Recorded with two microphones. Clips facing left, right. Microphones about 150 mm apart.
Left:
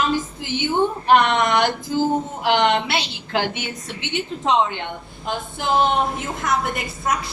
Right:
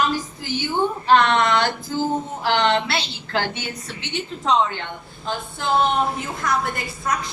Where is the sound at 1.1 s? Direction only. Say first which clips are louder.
Even; 15° left (ahead or behind).